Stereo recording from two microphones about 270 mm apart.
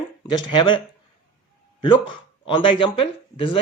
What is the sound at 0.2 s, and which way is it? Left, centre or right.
Speech, centre.